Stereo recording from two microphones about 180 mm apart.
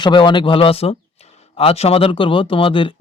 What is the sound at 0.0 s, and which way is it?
A man's voice, 25° left (ahead or behind).